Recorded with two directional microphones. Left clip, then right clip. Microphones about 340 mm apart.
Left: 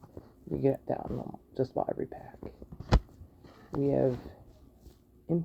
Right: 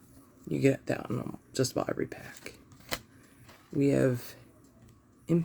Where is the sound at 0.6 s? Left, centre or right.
Right.